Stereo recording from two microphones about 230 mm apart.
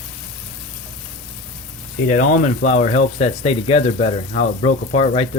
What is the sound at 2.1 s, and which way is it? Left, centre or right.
Speech, left.